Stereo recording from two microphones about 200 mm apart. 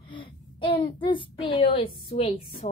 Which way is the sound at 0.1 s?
25° left (ahead or behind).